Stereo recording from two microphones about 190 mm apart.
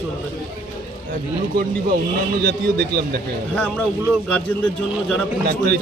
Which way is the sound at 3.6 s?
10° left (ahead or behind).